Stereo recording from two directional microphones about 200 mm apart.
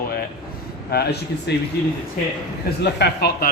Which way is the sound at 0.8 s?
55° left (ahead or behind).